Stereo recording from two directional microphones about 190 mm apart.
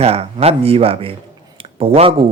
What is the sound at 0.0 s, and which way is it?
Speech, 30° right (ahead or behind).